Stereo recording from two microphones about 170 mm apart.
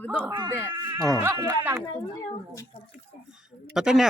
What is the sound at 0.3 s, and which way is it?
Speech, 30° right (ahead or behind).